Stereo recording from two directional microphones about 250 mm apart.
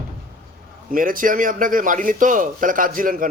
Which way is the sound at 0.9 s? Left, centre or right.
Right.